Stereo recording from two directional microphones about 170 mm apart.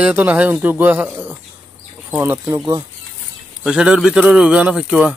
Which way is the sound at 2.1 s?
10° right (ahead or behind).